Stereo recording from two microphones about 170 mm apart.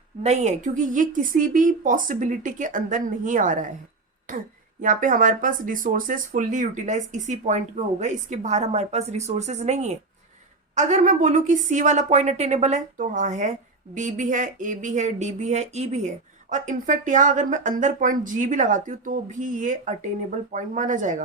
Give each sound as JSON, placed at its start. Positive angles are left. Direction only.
{"t": 0.2, "sound": "a woman's voice", "side_deg": -40}
{"t": 4.8, "sound": "a woman's voice", "side_deg": -50}